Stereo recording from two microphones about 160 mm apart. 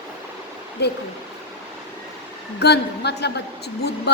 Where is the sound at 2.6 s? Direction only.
90° left.